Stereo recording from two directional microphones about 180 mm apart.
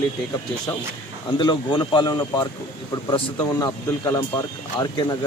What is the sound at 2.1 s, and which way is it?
Speech, 15° left (ahead or behind).